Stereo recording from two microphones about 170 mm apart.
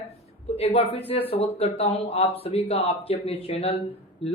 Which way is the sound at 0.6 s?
35° left (ahead or behind).